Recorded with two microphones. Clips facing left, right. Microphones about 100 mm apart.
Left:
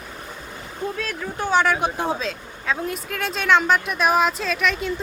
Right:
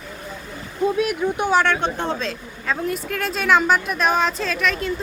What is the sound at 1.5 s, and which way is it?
Speech, 5° left (ahead or behind).